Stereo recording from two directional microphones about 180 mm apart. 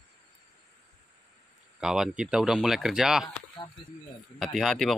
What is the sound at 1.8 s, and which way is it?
Speech, 5° right (ahead or behind).